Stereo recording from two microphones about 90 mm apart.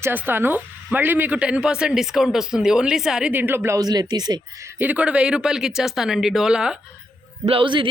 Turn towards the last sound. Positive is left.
turn(degrees=-65)  # may be behind; listen again after turning